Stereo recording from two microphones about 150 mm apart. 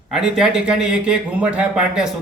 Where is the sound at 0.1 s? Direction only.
5° right (ahead or behind).